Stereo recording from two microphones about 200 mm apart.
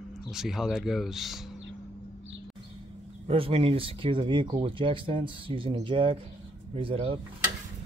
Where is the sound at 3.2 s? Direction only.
25° right (ahead or behind).